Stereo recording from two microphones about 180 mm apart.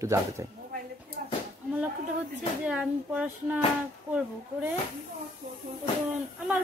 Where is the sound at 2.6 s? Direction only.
5° right (ahead or behind).